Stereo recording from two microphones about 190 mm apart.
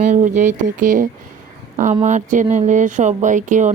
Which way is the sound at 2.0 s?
40° right (ahead or behind).